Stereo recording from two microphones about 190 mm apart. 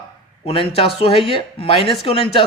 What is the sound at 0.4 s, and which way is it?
Speech, 30° left (ahead or behind).